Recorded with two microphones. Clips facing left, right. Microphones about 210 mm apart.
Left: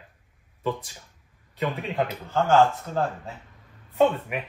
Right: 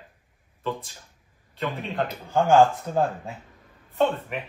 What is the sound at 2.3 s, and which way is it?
Speech, 15° right (ahead or behind).